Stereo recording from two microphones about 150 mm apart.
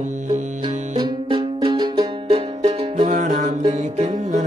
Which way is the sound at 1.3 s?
35° right (ahead or behind).